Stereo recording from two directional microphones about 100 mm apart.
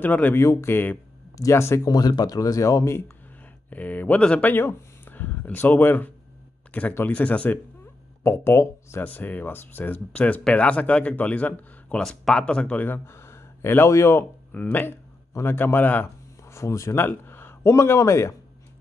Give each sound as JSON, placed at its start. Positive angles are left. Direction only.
{"t": 0.0, "sound": "speech", "side_deg": 15}
{"t": 1.9, "sound": "speech", "side_deg": 40}
{"t": 3.7, "sound": "speech", "side_deg": 15}
{"t": 14.5, "sound": "speech", "side_deg": 15}